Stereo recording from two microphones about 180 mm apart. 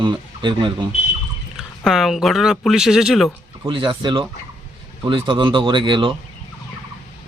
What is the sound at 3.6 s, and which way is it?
A man's voice, 30° right (ahead or behind).